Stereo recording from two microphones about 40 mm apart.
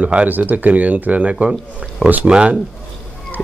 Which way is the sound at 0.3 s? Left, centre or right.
Right.